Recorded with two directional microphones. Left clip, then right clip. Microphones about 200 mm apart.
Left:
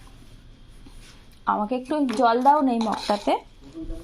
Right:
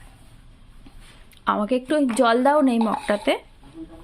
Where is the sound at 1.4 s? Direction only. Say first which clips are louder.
Right 1 dB; 50° right (ahead or behind).